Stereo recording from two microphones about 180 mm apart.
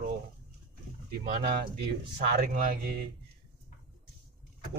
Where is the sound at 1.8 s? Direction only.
55° right (ahead or behind).